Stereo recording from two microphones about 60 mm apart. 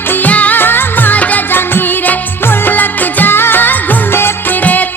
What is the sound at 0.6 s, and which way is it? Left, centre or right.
Music, left.